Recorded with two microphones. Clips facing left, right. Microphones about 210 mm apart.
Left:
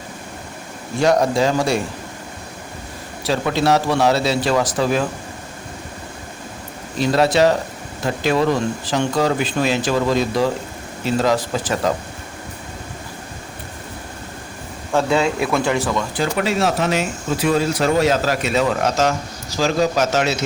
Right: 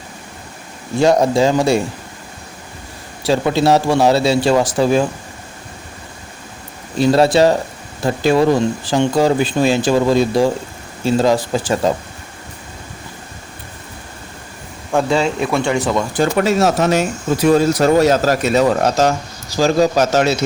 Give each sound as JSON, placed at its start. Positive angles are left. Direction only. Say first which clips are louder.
{"t": 1.0, "sound": "speech", "louder": "right 3 dB", "side_deg": -25}
{"t": 3.2, "sound": "speech", "louder": "right 4 dB", "side_deg": -25}
{"t": 7.0, "sound": "speech", "louder": "right 4 dB", "side_deg": -30}
{"t": 15.1, "sound": "speech", "louder": "even", "side_deg": 0}
{"t": 16.1, "sound": "speech", "louder": "right 7 dB", "side_deg": -45}